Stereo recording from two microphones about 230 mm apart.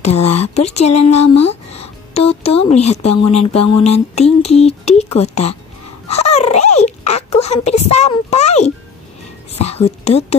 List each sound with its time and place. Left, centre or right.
0.2 s speech: left
0.6 s speech: left
0.8 s speech: left
1.1 s speech: left
6.0 s dog: left
9.5 s whispering: left